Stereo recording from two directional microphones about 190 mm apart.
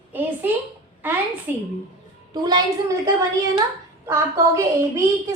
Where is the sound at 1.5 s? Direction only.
10° right (ahead or behind).